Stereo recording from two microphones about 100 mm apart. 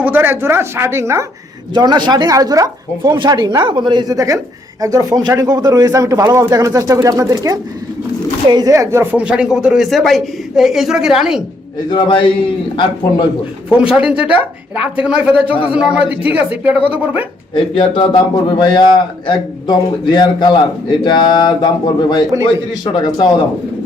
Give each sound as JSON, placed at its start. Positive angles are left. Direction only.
{"t": 0.0, "sound": "speech", "side_deg": -20}
{"t": 1.7, "sound": "speech", "side_deg": -45}
{"t": 4.8, "sound": "speech", "side_deg": -35}
{"t": 8.7, "sound": "speech", "side_deg": -30}
{"t": 9.1, "sound": "speech", "side_deg": -10}
{"t": 11.9, "sound": "a man's voice", "side_deg": 55}
{"t": 13.7, "sound": "speech", "side_deg": -10}
{"t": 15.4, "sound": "a man's voice", "side_deg": 65}
{"t": 15.7, "sound": "speech", "side_deg": -10}
{"t": 17.5, "sound": "a man's voice", "side_deg": 55}